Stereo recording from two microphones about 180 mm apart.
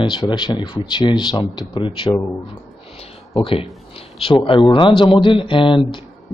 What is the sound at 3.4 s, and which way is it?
Speech, 30° left (ahead or behind).